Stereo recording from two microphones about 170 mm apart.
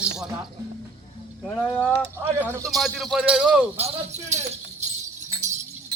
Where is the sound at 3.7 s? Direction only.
40° right (ahead or behind).